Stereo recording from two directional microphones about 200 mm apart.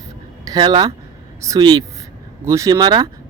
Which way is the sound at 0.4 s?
20° right (ahead or behind).